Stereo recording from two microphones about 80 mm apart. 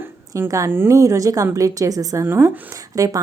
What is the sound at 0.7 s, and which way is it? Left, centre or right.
Speech, right.